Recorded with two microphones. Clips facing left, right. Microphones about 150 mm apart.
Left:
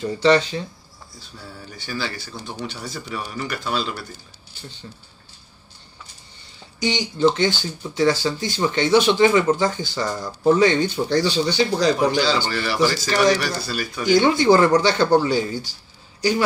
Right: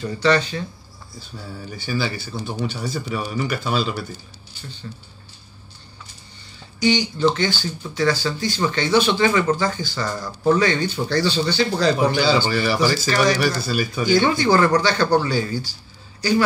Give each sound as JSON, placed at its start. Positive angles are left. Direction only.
{"t": 0.0, "sound": "speech", "side_deg": 20}
{"t": 1.7, "sound": "speech", "side_deg": -5}
{"t": 4.9, "sound": "speech", "side_deg": 10}
{"t": 6.8, "sound": "speech", "side_deg": 20}
{"t": 12.0, "sound": "speech", "side_deg": -5}
{"t": 14.0, "sound": "speech", "side_deg": 20}